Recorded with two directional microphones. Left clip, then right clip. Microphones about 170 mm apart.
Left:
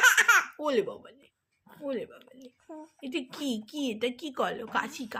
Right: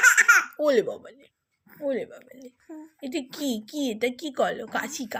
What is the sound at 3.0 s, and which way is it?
A woman's voice, 15° right (ahead or behind).